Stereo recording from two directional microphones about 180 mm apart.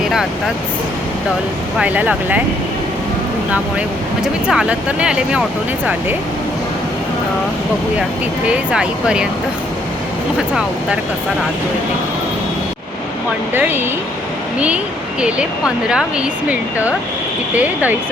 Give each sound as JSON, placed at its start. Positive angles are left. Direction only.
{"t": 1.8, "sound": "speech", "side_deg": -10}
{"t": 4.2, "sound": "speech", "side_deg": -5}
{"t": 8.4, "sound": "speech", "side_deg": -5}
{"t": 13.5, "sound": "speech", "side_deg": -10}
{"t": 15.2, "sound": "speech", "side_deg": -5}